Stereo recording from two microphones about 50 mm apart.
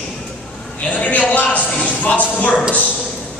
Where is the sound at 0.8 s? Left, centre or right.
Left.